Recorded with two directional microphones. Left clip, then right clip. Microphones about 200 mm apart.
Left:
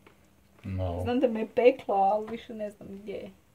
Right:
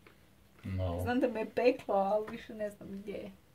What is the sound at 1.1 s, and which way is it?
Speech, 25° left (ahead or behind).